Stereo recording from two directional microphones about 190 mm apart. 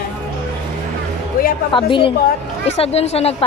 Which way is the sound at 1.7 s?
25° left (ahead or behind).